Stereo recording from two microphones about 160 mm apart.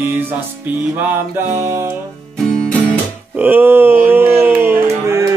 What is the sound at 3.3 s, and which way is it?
Music, 10° right (ahead or behind).